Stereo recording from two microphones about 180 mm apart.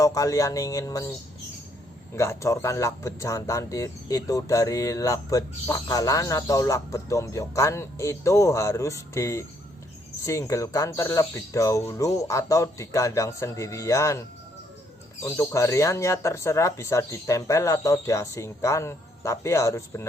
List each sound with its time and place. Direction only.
0.0 s speech: 20° left (ahead or behind)
2.1 s speech: 15° left (ahead or behind)